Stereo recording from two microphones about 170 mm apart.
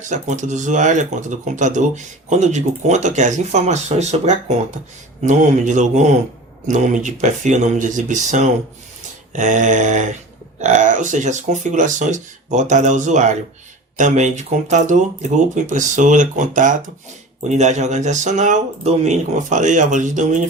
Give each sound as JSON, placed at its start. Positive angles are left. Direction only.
{"t": 0.0, "sound": "speech", "side_deg": -45}